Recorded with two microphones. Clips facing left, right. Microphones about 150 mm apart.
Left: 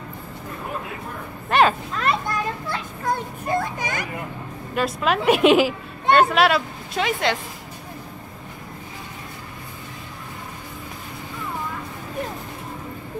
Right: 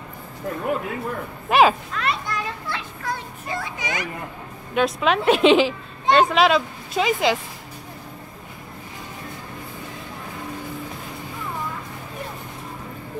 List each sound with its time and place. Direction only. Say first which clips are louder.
1.5 s speech: right 2 dB; 5° right (ahead or behind)
2.0 s a child's voice: left 3 dB; 45° left (ahead or behind)
4.7 s a woman's voice: right 2 dB; centre (ahead or behind)